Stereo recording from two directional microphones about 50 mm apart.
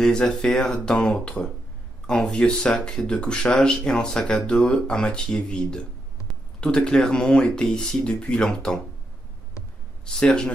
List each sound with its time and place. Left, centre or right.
0.0 s speech: centre
10.0 s speech: centre